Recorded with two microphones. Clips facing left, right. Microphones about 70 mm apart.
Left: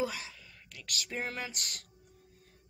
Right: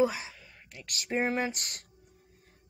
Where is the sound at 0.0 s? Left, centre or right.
Centre.